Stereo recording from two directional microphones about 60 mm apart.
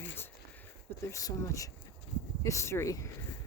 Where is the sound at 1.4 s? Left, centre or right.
Left.